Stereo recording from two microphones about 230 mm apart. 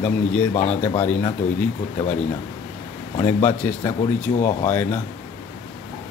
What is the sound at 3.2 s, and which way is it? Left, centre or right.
Speech, centre.